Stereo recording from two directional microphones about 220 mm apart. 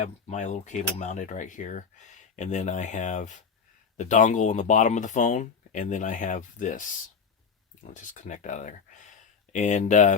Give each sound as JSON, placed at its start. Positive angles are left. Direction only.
{"t": 0.0, "sound": "speech", "side_deg": 30}
{"t": 7.9, "sound": "speech", "side_deg": 35}